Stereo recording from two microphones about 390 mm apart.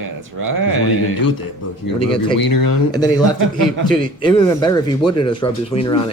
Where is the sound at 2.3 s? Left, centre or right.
Left.